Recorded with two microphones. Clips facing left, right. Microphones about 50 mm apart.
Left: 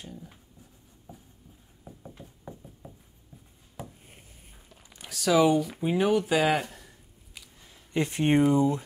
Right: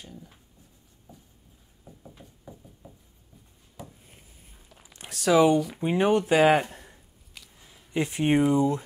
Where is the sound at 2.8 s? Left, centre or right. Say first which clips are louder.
Left 2 dB; left.